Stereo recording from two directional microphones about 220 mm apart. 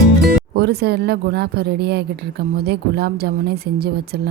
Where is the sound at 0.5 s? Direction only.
45° right (ahead or behind).